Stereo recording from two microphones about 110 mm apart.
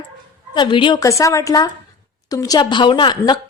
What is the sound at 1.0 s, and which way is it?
A woman's voice, 30° left (ahead or behind).